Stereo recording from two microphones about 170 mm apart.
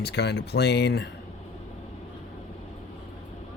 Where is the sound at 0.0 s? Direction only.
80° left.